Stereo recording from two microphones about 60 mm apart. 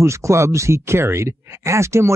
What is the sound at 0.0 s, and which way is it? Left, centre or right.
Speech, right.